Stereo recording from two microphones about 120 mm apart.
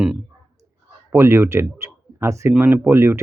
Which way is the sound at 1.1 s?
20° right (ahead or behind).